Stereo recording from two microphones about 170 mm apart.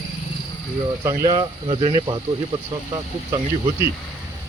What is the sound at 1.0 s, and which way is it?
Speech, 20° right (ahead or behind).